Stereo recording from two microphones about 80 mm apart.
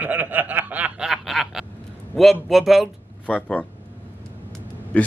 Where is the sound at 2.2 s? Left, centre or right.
Centre.